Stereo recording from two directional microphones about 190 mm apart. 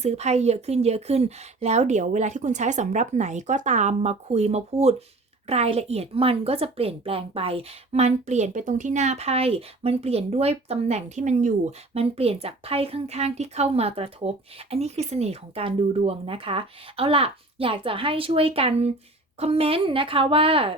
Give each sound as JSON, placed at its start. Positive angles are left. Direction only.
{"t": 0.0, "sound": "a woman's voice", "side_deg": -35}